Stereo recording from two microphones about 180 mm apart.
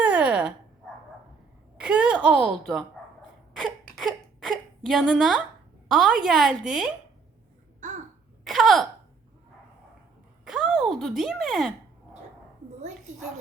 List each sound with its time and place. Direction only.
0.0 s dog: 10° right (ahead or behind)
1.8 s a woman's voice: 5° right (ahead or behind)
3.6 s a sound: centre (ahead or behind)
5.9 s a woman's voice: 5° right (ahead or behind)
7.8 s babbling: 45° right (ahead or behind)
8.4 s a woman's voice: centre (ahead or behind)
10.4 s speech: 5° right (ahead or behind)